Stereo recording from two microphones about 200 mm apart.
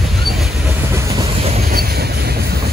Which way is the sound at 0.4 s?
10° right (ahead or behind).